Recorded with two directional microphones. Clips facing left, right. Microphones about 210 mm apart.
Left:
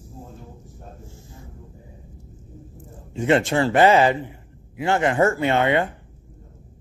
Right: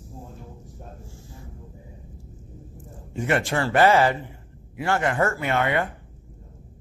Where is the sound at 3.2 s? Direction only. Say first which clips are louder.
Left 5 dB; 25° left (ahead or behind).